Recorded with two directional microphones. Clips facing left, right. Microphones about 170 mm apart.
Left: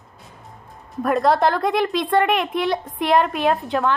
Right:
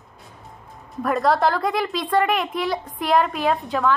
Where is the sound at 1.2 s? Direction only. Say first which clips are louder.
Left 1 dB; 20° left (ahead or behind).